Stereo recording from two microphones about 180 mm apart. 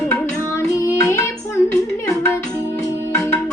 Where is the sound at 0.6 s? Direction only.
15° left (ahead or behind).